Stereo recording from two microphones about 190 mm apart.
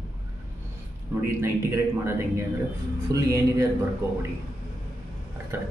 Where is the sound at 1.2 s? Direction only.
15° right (ahead or behind).